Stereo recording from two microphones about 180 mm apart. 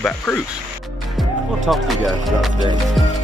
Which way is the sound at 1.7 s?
Centre (ahead or behind).